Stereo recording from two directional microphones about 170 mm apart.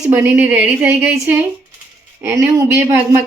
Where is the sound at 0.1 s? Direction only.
10° right (ahead or behind).